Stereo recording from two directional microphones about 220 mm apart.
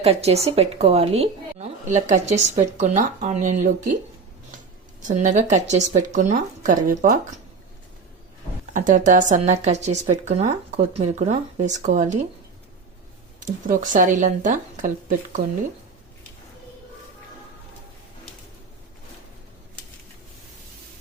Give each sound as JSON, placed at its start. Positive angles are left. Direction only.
{"t": 0.0, "sound": "a woman's voice", "side_deg": -30}
{"t": 5.0, "sound": "a woman's voice", "side_deg": -35}
{"t": 8.7, "sound": "a woman's voice", "side_deg": -35}
{"t": 13.4, "sound": "a woman's voice", "side_deg": -35}